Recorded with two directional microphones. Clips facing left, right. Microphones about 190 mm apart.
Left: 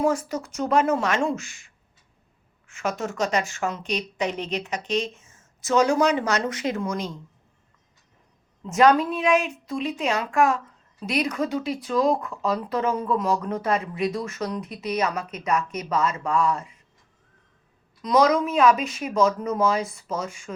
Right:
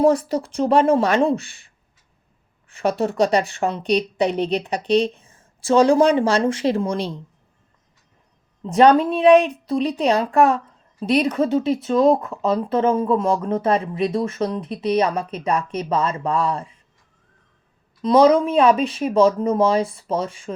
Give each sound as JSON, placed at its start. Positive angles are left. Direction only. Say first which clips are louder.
{"t": 0.0, "sound": "a woman's voice", "louder": "right 7 dB", "side_deg": -35}
{"t": 8.6, "sound": "a woman's voice", "louder": "right 4 dB", "side_deg": -30}
{"t": 18.0, "sound": "a woman's voice", "louder": "right 6 dB", "side_deg": -30}